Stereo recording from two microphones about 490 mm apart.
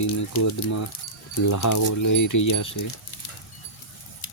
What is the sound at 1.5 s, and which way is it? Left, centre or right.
Speech, left.